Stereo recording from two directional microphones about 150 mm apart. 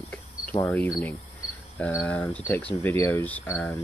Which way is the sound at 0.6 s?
10° left (ahead or behind).